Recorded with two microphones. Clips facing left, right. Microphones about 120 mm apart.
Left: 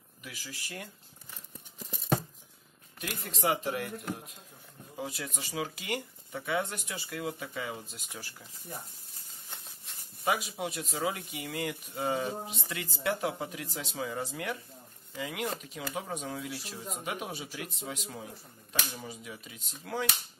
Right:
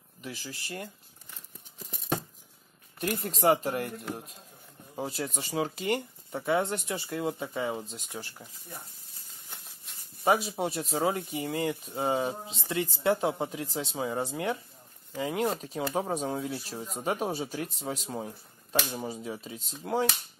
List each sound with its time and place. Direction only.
0.2 s speech: 30° right (ahead or behind)
3.0 s speech: 40° right (ahead or behind)
4.9 s speech: 35° right (ahead or behind)
10.2 s speech: 35° right (ahead or behind)